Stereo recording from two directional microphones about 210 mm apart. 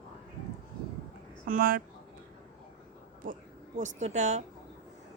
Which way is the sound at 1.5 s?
40° right (ahead or behind).